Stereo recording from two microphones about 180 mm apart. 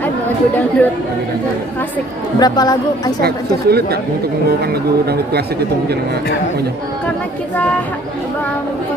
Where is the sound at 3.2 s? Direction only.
60° right (ahead or behind).